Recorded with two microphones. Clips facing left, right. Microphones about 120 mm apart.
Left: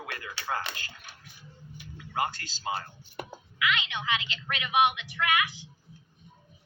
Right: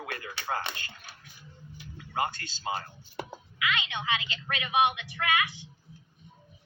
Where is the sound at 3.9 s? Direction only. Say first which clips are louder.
Even; 30° right (ahead or behind).